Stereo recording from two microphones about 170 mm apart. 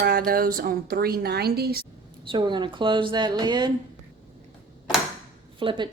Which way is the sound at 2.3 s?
30° right (ahead or behind).